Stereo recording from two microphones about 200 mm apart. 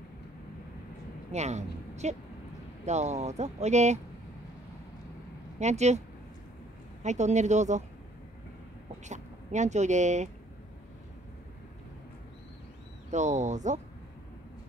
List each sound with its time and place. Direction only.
1.3 s a woman's voice: 35° right (ahead or behind)
5.6 s speech: 35° right (ahead or behind)
9.0 s speech: 35° right (ahead or behind)
13.1 s speech: 35° right (ahead or behind)